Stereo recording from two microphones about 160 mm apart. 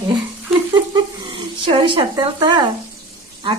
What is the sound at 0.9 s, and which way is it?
Speech, 30° right (ahead or behind).